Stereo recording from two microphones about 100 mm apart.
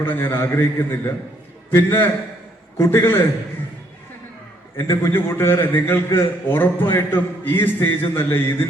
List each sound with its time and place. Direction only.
0.0 s a man's voice: 20° left (ahead or behind)
4.8 s a man's voice: 25° left (ahead or behind)